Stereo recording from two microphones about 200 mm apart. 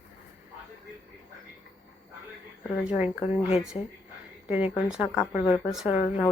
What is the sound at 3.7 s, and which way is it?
Speech, 25° left (ahead or behind).